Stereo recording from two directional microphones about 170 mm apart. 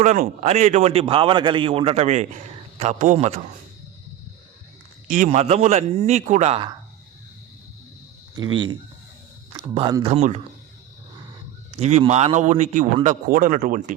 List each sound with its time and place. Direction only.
0.0 s a man's voice: 45° right (ahead or behind)
5.0 s a man's voice: 50° right (ahead or behind)
8.4 s speech: 30° right (ahead or behind)
10.0 s a man's voice: 35° right (ahead or behind)
11.7 s a man's voice: 40° right (ahead or behind)